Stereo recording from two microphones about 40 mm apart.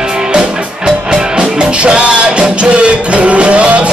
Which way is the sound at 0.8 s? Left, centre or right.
Right.